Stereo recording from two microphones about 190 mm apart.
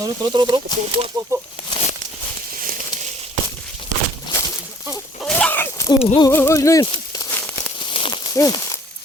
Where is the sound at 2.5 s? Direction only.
45° right (ahead or behind).